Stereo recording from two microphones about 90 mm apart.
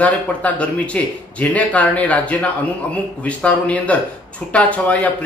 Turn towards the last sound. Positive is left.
turn(degrees=15)  # may be behind; listen again after turning